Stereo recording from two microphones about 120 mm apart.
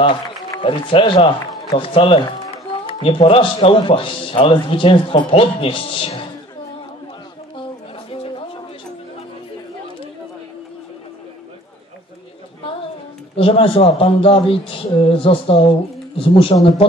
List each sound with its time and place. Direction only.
0.0 s a man's voice: 45° left (ahead or behind)
8.1 s a sound: 45° left (ahead or behind)
13.4 s a man's voice: 50° left (ahead or behind)